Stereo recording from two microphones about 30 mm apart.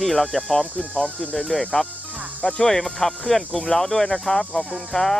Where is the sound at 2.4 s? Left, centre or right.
Left.